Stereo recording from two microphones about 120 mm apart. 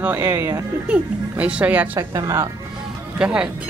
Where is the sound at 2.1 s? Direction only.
30° right (ahead or behind).